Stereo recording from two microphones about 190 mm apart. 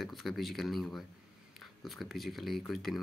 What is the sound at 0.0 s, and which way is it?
Speech, centre (ahead or behind).